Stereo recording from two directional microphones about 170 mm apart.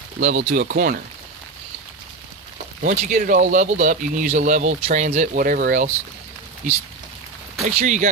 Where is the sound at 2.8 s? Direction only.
50° right (ahead or behind).